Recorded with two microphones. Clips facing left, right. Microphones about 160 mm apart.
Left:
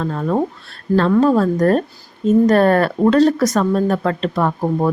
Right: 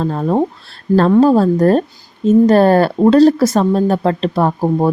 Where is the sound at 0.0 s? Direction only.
30° right (ahead or behind).